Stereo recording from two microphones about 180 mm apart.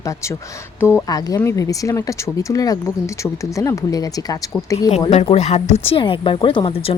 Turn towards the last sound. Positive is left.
turn(degrees=35)  # may be behind; listen again after turning